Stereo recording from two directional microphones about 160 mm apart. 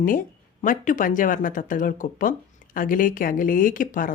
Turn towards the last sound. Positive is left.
turn(degrees=60)  # may be behind; listen again after turning